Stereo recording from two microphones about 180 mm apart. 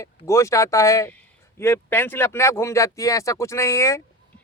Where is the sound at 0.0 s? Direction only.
15° left (ahead or behind).